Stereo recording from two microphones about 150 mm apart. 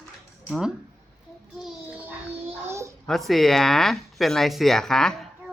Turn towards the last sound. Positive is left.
turn(degrees=5)  # may be behind; listen again after turning